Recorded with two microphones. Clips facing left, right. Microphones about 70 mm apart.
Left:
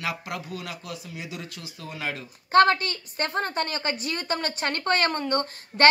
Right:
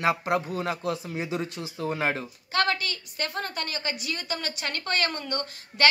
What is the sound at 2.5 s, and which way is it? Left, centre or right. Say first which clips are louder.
A woman's voice: left 8 dB; left.